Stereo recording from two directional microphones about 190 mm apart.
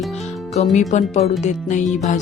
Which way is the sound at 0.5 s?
35° left (ahead or behind).